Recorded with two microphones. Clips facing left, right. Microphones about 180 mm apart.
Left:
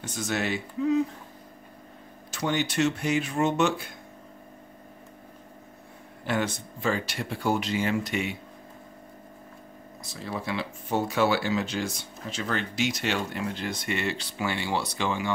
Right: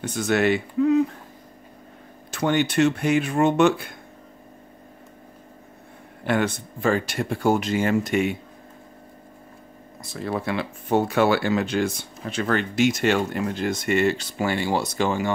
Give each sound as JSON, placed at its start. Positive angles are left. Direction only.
{"t": 0.0, "sound": "speech", "side_deg": -60}
{"t": 2.3, "sound": "speech", "side_deg": -55}
{"t": 6.2, "sound": "speech", "side_deg": -60}
{"t": 10.1, "sound": "speech", "side_deg": -55}